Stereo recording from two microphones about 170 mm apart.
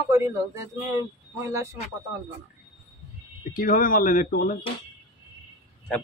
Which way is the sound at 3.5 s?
55° left (ahead or behind).